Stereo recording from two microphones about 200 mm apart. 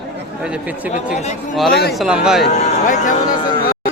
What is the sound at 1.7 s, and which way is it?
Speech, 50° left (ahead or behind).